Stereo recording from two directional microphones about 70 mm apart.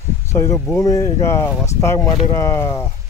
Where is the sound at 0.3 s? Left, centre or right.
Left.